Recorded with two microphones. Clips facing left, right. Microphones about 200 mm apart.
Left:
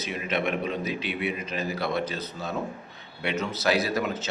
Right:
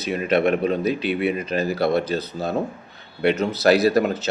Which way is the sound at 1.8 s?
35° right (ahead or behind).